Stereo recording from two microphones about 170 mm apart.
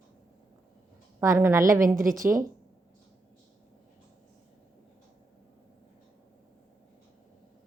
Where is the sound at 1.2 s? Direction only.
15° right (ahead or behind).